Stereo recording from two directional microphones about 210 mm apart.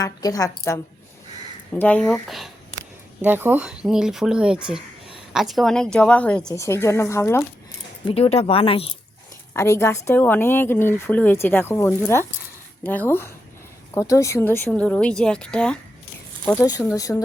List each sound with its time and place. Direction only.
0.0 s a woman's voice: 15° left (ahead or behind)
8.0 s speech: 30° left (ahead or behind)
9.5 s a woman's voice: 10° left (ahead or behind)
16.5 s a woman's voice: 15° left (ahead or behind)